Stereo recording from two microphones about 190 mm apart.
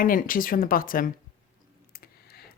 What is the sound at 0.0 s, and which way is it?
Speech, 50° left (ahead or behind).